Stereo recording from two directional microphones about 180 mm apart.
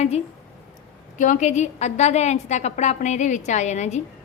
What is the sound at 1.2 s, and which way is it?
A woman's voice, 45° left (ahead or behind).